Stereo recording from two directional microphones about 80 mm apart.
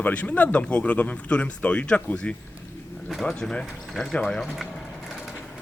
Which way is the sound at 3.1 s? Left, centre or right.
Centre.